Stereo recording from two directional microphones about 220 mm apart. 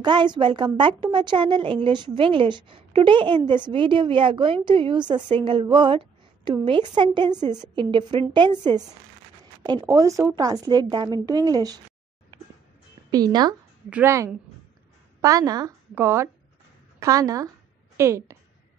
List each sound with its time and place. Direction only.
0.0 s a woman's voice: 20° right (ahead or behind)
13.1 s a woman's voice: 20° right (ahead or behind)